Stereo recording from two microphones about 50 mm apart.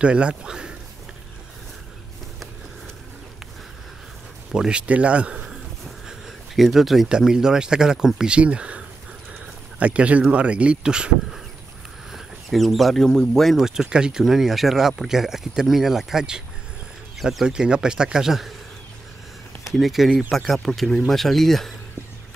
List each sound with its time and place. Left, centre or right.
0.0 s speech: right
4.5 s speech: centre
6.0 s speech: centre
8.4 s speech: right
9.3 s a sound: right
10.3 s speech: right
12.1 s speech: centre
13.6 s speech: centre
14.2 s speech: centre
17.5 s speech: centre
19.6 s speech: centre